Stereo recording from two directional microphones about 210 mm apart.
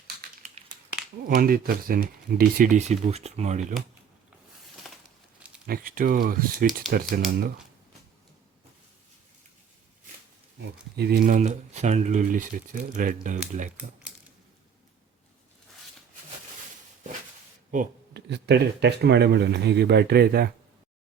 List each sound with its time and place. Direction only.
1.4 s speech: 45° right (ahead or behind)
5.6 s speech: 45° right (ahead or behind)
10.6 s speech: 50° right (ahead or behind)
11.3 s speech: 35° right (ahead or behind)
17.7 s speech: 45° right (ahead or behind)